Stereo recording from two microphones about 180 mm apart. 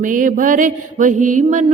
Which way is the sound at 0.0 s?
45° right (ahead or behind).